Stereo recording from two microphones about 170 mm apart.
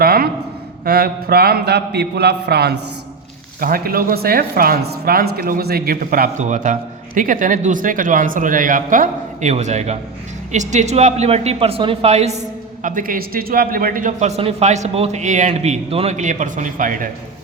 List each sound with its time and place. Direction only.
0.0 s a sound: 60° right (ahead or behind)
0.9 s a man's voice: 65° right (ahead or behind)
3.6 s a woman's voice: 60° right (ahead or behind); by 12.4 s 40° right (ahead or behind)
12.8 s a woman's voice: 50° right (ahead or behind)